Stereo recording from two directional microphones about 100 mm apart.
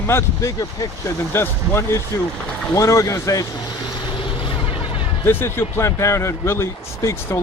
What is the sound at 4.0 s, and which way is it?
Boat, 60° left (ahead or behind).